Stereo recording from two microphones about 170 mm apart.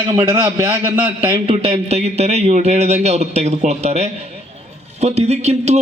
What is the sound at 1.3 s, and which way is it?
Speech, 35° right (ahead or behind).